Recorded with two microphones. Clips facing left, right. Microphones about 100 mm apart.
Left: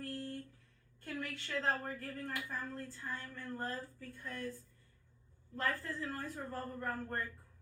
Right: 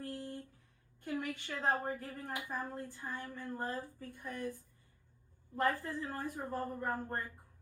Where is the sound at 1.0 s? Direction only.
15° right (ahead or behind).